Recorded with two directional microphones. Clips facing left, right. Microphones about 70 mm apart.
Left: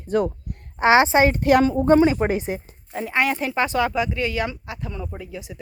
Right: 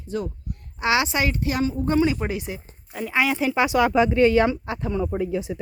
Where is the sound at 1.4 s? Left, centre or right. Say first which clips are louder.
Left 7 dB; left.